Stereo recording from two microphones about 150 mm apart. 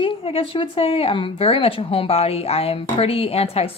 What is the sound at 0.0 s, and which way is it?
A woman's voice, 35° left (ahead or behind).